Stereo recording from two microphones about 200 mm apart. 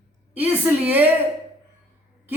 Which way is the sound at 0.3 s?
10° right (ahead or behind).